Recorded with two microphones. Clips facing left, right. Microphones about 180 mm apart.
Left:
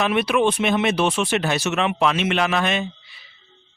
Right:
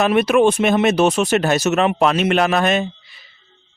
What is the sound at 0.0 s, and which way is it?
A man's voice, 45° right (ahead or behind).